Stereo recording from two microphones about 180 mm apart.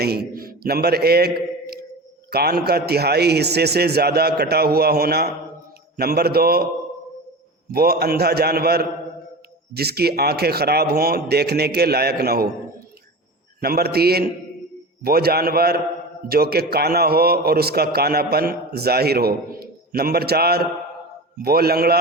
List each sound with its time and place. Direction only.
0.0 s a man's voice: 60° right (ahead or behind)
7.7 s a man's voice: 60° right (ahead or behind)
13.6 s a man's voice: 60° right (ahead or behind)